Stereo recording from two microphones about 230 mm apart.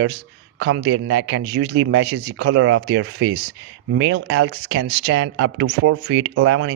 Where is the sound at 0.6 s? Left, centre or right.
Right.